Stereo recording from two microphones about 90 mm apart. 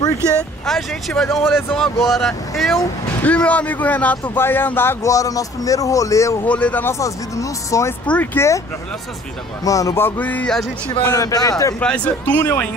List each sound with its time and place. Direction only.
0.7 s speech: 5° left (ahead or behind)
3.2 s speech: 15° left (ahead or behind)
5.0 s speech: 40° left (ahead or behind)
6.4 s speech: 15° left (ahead or behind)
6.9 s speech: 35° left (ahead or behind)
8.4 s a man's voice: 25° left (ahead or behind)
9.7 s speech: 40° left (ahead or behind)
9.9 s a man's voice: 20° left (ahead or behind)
11.1 s speech: 40° left (ahead or behind)
11.8 s a man's voice: 15° left (ahead or behind)